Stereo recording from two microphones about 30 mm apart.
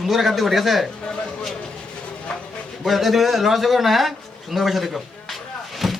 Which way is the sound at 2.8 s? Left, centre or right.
Centre.